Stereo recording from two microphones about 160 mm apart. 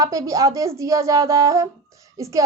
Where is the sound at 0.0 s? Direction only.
20° right (ahead or behind).